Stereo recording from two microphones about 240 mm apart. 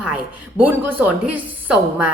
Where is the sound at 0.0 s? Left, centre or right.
Centre.